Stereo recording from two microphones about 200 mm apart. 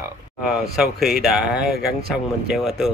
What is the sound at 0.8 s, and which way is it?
Speech, centre (ahead or behind).